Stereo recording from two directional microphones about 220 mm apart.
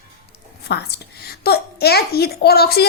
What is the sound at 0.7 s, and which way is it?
A woman's voice, 50° left (ahead or behind).